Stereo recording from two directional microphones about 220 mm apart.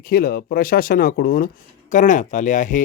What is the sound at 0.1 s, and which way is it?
Speech, 45° left (ahead or behind).